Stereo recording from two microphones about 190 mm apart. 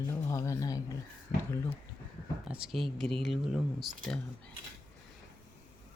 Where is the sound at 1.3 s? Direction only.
50° left (ahead or behind).